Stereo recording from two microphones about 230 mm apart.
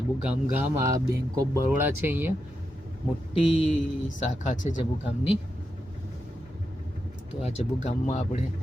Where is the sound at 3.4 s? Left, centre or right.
Left.